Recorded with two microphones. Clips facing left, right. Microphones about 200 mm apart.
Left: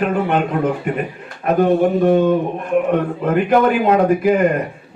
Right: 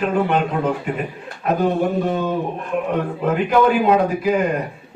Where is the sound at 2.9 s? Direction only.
55° left (ahead or behind).